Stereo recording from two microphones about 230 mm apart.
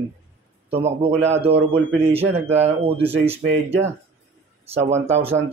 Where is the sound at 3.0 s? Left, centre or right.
Centre.